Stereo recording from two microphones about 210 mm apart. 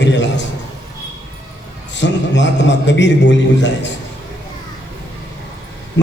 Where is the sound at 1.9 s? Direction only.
60° left (ahead or behind).